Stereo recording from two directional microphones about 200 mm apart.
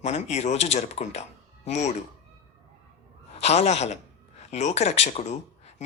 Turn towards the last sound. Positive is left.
turn(degrees=35)  # may be behind; listen again after turning